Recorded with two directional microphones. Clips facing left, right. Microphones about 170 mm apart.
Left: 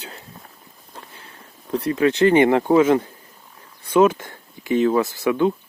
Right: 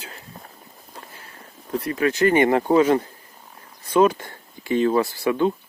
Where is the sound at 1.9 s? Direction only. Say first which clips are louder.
Left 3 dB; 25° left (ahead or behind).